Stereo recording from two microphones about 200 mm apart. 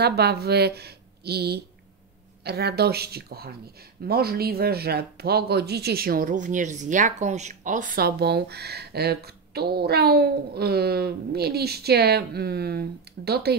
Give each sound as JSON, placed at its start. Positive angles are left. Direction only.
{"t": 0.0, "sound": "speech", "side_deg": -55}